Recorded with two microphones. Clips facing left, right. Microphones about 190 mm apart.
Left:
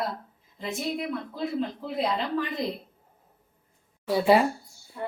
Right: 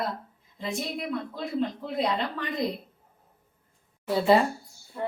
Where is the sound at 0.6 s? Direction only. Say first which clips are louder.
Left 1 dB; centre (ahead or behind).